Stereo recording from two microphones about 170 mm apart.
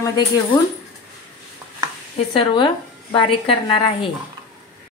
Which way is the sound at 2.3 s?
30° left (ahead or behind).